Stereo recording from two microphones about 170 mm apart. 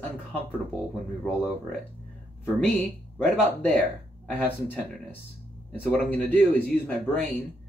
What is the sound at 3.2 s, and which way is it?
Speech, 10° left (ahead or behind).